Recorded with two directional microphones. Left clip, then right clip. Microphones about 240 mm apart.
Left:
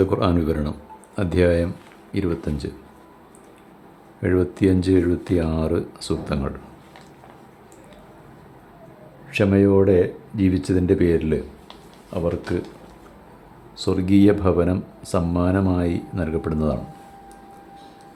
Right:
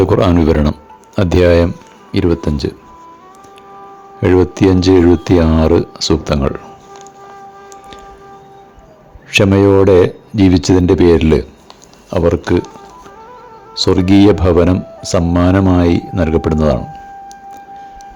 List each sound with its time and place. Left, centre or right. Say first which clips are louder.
0.0 s speech: right 9 dB; right
4.2 s speech: right 9 dB; right
9.3 s speech: right 8 dB; right
13.7 s speech: right 9 dB; right